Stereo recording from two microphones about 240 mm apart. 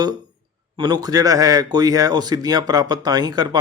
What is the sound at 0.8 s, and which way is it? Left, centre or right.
Speech, centre.